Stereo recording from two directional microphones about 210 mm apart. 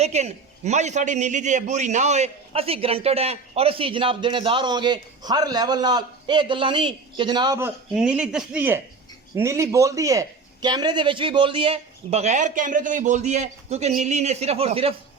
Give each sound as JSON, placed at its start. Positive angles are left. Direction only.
{"t": 0.0, "sound": "a man's voice", "side_deg": -30}
{"t": 7.9, "sound": "a man's voice", "side_deg": -5}